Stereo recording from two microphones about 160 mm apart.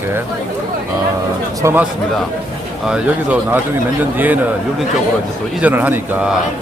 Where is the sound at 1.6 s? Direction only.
15° right (ahead or behind).